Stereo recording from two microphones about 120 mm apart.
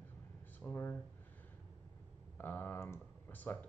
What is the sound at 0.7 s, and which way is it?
Speech, 20° left (ahead or behind).